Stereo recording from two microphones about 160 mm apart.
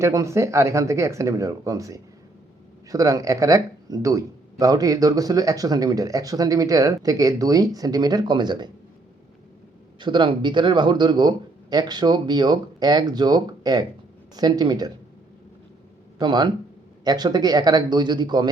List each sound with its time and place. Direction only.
0.0 s speech: 20° right (ahead or behind)
10.0 s speech: 30° right (ahead or behind)
16.1 s speech: 25° right (ahead or behind)